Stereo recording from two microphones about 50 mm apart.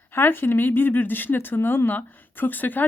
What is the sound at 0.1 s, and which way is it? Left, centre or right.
Speech, left.